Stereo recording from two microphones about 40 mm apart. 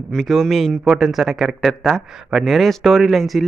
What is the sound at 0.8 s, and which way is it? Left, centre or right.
Speech, centre.